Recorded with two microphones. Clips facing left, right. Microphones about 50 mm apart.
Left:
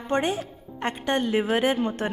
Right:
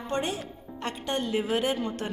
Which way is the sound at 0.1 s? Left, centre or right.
Left.